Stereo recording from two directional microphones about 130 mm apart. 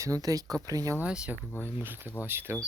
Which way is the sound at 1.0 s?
10° right (ahead or behind).